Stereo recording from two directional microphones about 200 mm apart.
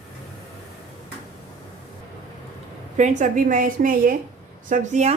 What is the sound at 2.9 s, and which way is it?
A woman's voice, 35° right (ahead or behind).